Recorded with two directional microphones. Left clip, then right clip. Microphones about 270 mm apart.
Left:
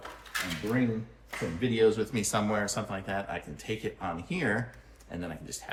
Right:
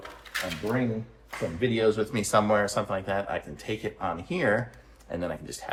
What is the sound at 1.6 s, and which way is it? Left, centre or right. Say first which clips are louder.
A man's voice: right 1 dB; centre.